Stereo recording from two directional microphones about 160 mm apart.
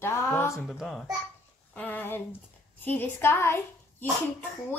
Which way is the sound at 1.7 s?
10° left (ahead or behind).